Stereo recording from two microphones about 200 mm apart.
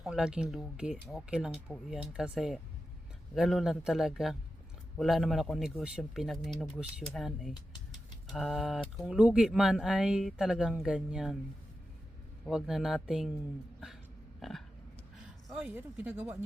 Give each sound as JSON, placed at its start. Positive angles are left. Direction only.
{"t": 0.0, "sound": "speech", "side_deg": -5}
{"t": 12.5, "sound": "speech", "side_deg": 0}
{"t": 14.4, "sound": "speech", "side_deg": 0}